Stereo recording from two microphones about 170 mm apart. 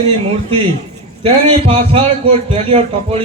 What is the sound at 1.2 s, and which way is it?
A man's voice, 35° right (ahead or behind).